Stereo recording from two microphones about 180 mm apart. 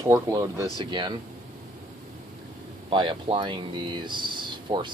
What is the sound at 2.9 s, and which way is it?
Speech, 25° right (ahead or behind).